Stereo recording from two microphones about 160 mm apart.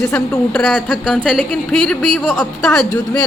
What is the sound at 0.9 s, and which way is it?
A woman's voice, 5° right (ahead or behind).